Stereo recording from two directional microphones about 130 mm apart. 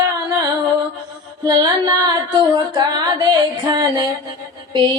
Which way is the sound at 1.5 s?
30° right (ahead or behind).